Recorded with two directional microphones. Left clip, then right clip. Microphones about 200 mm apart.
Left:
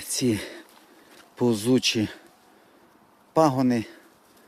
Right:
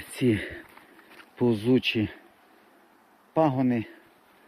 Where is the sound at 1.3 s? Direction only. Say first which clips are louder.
Left 1 dB; 20° left (ahead or behind).